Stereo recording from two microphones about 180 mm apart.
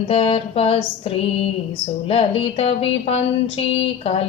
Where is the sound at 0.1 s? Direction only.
35° left (ahead or behind).